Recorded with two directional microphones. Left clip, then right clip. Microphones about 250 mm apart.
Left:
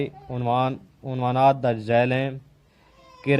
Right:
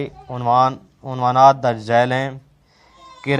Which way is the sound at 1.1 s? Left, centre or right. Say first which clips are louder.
Right 7 dB; centre.